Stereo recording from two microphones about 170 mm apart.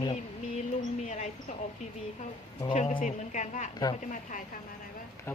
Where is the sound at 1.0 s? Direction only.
45° left (ahead or behind).